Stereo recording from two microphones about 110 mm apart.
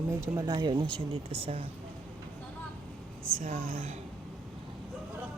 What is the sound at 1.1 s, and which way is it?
Speech, 60° right (ahead or behind).